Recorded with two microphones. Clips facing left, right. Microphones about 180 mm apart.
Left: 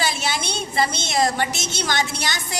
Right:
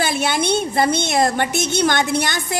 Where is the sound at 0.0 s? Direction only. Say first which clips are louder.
Right 5 dB; 55° right (ahead or behind).